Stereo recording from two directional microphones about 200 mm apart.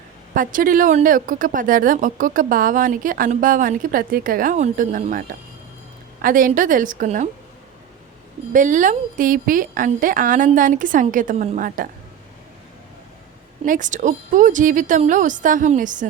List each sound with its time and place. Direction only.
0.3 s a woman's voice: 45° right (ahead or behind)
6.2 s a woman's voice: 40° right (ahead or behind)
8.5 s speech: 40° right (ahead or behind)
13.7 s speech: 40° right (ahead or behind)